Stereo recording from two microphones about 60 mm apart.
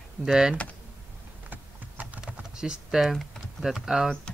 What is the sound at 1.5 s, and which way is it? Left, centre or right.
Typing, right.